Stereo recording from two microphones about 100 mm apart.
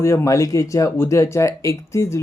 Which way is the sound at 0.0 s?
30° left (ahead or behind).